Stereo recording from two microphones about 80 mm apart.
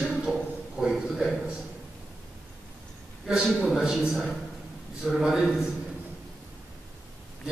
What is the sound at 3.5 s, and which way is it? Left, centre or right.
A man's voice, centre.